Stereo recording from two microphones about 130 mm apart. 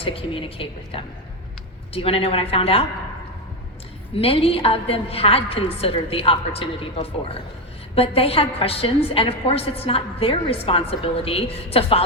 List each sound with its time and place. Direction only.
0.0 s a woman's voice: 45° left (ahead or behind)
4.1 s a woman's voice: 45° left (ahead or behind)